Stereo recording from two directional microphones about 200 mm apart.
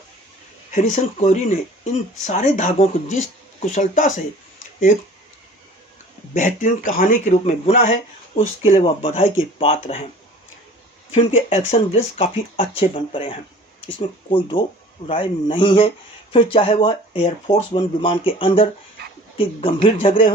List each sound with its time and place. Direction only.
0.7 s speech: 35° left (ahead or behind)
4.6 s a sound: 40° left (ahead or behind)
6.3 s speech: 40° left (ahead or behind)
11.1 s speech: 30° left (ahead or behind)